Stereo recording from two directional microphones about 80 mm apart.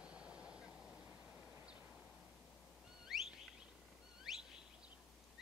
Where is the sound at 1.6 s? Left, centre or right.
Centre.